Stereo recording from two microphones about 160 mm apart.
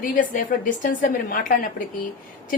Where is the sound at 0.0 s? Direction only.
60° left (ahead or behind).